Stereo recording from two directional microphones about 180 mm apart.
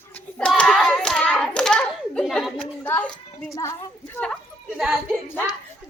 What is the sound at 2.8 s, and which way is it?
A woman's voice, 10° left (ahead or behind).